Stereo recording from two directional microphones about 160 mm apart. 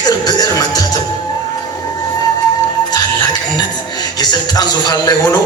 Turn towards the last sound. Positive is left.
turn(degrees=20)  # may be behind; listen again after turning